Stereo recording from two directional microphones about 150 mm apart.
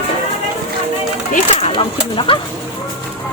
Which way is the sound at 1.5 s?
40° left (ahead or behind).